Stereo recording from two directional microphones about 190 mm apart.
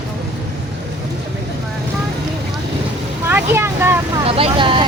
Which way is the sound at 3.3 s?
10° right (ahead or behind).